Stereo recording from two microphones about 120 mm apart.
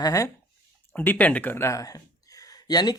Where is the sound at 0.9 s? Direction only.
15° left (ahead or behind).